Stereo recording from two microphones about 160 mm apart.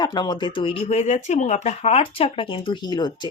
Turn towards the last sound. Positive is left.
turn(degrees=25)  # may be behind; listen again after turning